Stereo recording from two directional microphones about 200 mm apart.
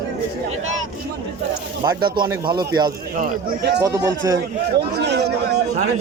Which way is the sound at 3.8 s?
20° right (ahead or behind).